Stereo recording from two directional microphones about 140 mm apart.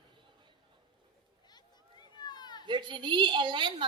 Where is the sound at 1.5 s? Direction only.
30° left (ahead or behind).